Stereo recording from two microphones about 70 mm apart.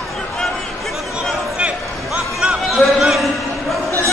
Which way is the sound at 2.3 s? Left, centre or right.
Centre.